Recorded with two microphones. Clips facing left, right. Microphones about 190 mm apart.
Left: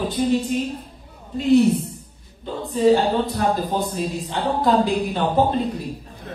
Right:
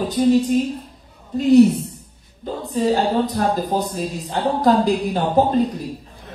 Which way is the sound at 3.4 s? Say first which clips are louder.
Right 1 dB; 40° right (ahead or behind).